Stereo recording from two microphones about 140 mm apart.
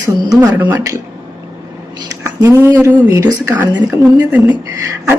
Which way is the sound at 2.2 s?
20° right (ahead or behind).